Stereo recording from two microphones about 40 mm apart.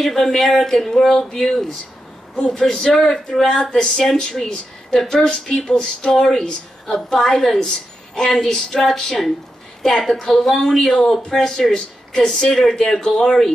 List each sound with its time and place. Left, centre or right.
0.0 s a woman's voice: centre